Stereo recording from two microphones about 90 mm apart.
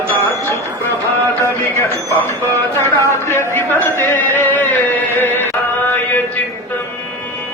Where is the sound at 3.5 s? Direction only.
25° left (ahead or behind).